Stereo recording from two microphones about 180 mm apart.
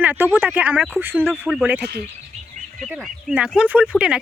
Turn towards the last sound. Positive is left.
turn(degrees=-5)  # may be behind; listen again after turning